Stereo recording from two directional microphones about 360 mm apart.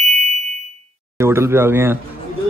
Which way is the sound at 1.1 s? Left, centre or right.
Centre.